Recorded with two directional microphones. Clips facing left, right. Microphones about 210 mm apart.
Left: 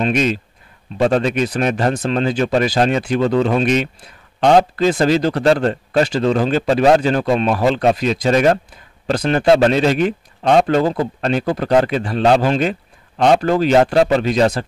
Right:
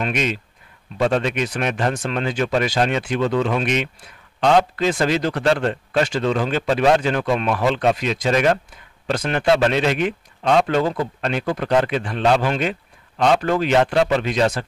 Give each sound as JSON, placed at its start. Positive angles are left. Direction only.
{"t": 0.0, "sound": "a man's voice", "side_deg": 35}